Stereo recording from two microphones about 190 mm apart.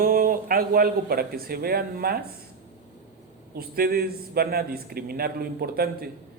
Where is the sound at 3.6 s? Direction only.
55° right (ahead or behind).